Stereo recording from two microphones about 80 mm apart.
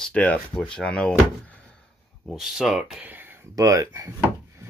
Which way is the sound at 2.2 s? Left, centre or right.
Centre.